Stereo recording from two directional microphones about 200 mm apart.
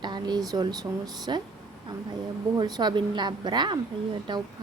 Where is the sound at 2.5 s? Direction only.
20° right (ahead or behind).